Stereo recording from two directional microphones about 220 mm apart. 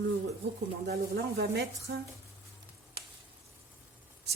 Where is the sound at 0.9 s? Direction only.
45° right (ahead or behind).